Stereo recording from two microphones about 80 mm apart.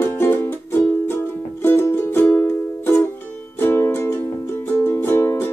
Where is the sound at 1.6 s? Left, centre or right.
Left.